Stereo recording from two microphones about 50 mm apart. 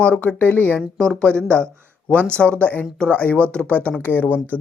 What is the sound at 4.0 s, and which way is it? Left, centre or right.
Speech, left.